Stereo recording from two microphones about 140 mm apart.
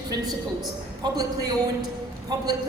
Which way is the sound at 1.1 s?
25° right (ahead or behind).